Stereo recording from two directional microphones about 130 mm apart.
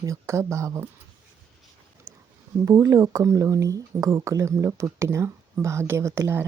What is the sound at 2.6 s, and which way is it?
Speech, 25° right (ahead or behind).